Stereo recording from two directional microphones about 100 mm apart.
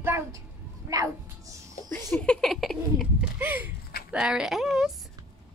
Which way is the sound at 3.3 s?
20° right (ahead or behind).